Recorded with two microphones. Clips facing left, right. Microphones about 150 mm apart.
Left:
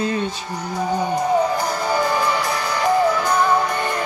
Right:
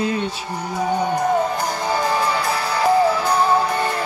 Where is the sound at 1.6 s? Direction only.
20° right (ahead or behind).